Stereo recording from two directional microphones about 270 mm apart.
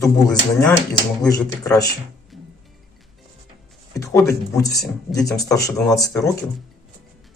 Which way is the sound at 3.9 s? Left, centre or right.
Centre.